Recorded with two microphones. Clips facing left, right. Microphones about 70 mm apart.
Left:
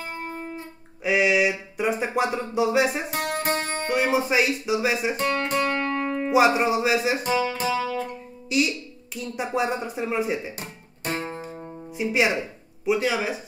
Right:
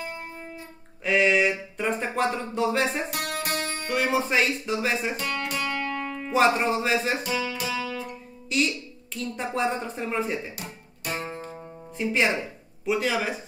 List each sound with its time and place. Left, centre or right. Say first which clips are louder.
0.1 s music: left 5 dB; left
1.0 s speech: left 1 dB; centre
3.1 s music: left 4 dB; left
3.9 s speech: left 2 dB; centre
5.1 s music: left 5 dB; left
6.3 s speech: left 2 dB; centre
7.2 s music: left 5 dB; left
8.5 s speech: left 2 dB; centre
11.4 s music: left 3 dB; centre